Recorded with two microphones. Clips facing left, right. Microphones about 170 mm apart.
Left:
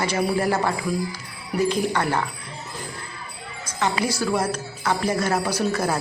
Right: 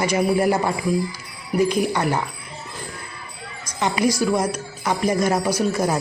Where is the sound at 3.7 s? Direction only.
15° right (ahead or behind).